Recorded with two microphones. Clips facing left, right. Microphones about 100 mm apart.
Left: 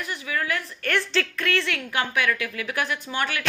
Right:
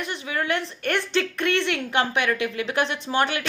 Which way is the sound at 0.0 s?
25° right (ahead or behind).